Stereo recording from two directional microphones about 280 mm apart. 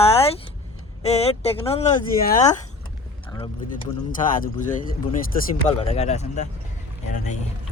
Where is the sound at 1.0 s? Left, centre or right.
Left.